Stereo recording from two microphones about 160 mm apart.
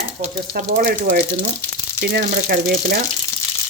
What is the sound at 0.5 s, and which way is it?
Speech, 70° right (ahead or behind).